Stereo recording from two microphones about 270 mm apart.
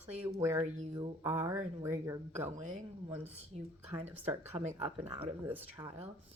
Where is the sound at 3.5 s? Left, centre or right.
Right.